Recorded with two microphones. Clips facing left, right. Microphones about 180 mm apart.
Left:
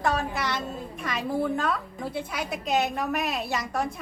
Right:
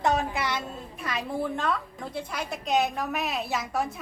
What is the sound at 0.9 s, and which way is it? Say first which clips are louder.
A woman's voice: left 2 dB; centre (ahead or behind).